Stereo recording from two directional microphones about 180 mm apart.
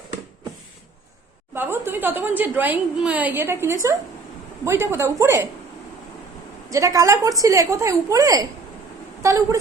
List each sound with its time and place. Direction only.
1.5 s a woman's voice: 10° right (ahead or behind)
6.7 s a woman's voice: 15° right (ahead or behind)